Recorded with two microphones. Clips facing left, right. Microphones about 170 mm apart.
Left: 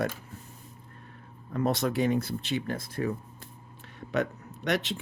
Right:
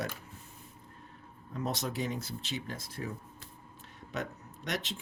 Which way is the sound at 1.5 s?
60° left (ahead or behind).